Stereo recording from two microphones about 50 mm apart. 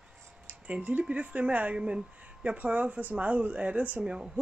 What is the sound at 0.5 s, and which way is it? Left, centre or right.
Speech, right.